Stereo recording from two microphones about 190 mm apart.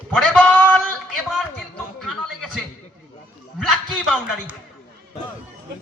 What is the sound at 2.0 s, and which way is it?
Chuckle, centre (ahead or behind).